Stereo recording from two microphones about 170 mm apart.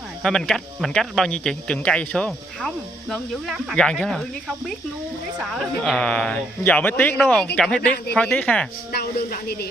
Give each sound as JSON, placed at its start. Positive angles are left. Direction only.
{"t": 0.2, "sound": "speech", "side_deg": 5}
{"t": 8.9, "sound": "speech", "side_deg": 65}